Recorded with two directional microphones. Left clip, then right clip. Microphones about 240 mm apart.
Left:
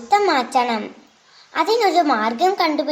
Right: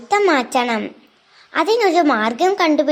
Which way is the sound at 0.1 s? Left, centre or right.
Right.